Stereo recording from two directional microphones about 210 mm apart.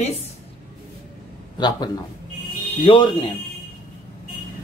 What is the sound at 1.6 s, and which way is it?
A man's voice, 20° left (ahead or behind).